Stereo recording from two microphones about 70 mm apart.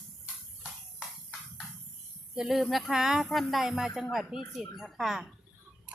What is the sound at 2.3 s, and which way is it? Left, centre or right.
A woman's voice, centre.